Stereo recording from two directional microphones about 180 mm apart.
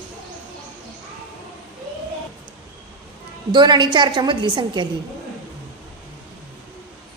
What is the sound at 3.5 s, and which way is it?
A woman's voice, 25° right (ahead or behind).